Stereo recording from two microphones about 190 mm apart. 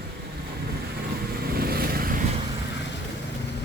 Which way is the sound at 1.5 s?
55° right (ahead or behind).